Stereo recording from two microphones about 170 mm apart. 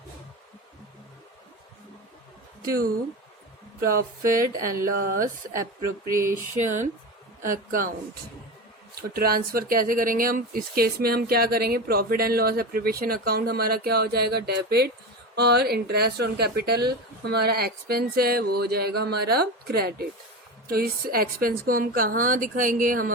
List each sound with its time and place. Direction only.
2.6 s speech: 60° right (ahead or behind)
7.4 s speech: 55° right (ahead or behind)
9.0 s speech: 60° right (ahead or behind)